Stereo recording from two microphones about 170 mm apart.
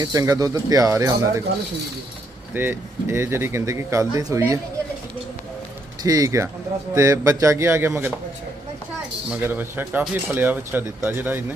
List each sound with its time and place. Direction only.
0.0 s speech: 20° right (ahead or behind)
2.5 s speech: 10° right (ahead or behind)
6.0 s speech: 20° right (ahead or behind)
9.3 s speech: 10° right (ahead or behind)